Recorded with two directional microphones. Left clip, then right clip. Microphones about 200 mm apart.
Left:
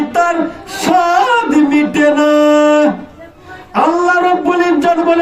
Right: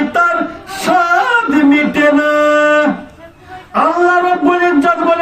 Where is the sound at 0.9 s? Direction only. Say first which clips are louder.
Left 1 dB; 15° right (ahead or behind).